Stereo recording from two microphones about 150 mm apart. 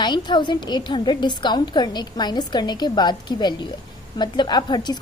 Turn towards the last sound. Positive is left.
turn(degrees=30)  # may be behind; listen again after turning